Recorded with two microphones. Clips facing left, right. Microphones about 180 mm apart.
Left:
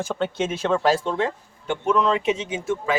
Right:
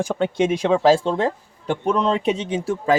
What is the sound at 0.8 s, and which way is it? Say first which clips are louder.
Speech: right 5 dB; 25° right (ahead or behind).